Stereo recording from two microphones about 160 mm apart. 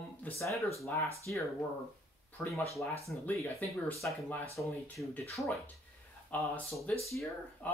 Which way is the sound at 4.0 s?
10° left (ahead or behind).